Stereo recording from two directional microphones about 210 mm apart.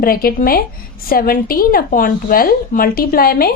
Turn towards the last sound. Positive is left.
turn(degrees=45)  # may be behind; listen again after turning